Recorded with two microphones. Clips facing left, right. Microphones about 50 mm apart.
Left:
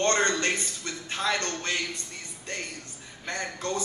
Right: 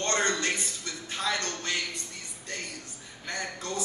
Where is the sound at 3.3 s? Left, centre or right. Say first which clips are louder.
Left 3 dB; left.